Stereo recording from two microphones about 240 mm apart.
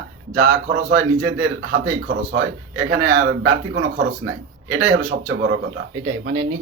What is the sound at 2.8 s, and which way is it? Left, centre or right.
Speech, right.